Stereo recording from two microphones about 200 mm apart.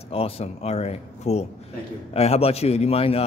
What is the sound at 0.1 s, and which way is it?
A man's voice, 30° left (ahead or behind).